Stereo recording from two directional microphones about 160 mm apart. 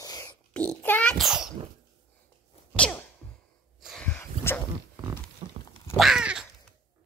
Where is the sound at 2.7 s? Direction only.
5° left (ahead or behind).